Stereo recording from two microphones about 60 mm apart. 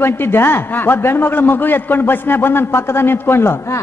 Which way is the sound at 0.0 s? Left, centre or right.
Left.